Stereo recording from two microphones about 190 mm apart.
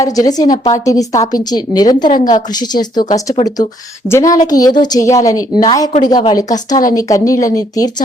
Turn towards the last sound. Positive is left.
turn(degrees=20)  # may be behind; listen again after turning